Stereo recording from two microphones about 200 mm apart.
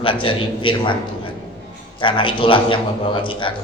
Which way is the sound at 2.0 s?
25° left (ahead or behind).